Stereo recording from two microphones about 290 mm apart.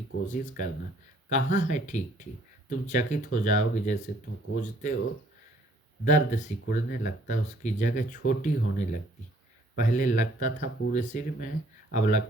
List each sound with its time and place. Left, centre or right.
0.3 s speech: left
6.1 s speech: left